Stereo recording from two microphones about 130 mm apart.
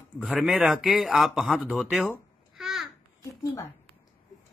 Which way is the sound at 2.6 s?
Centre (ahead or behind).